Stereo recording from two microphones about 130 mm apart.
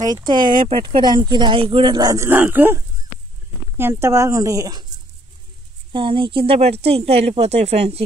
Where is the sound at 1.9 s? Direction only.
25° right (ahead or behind).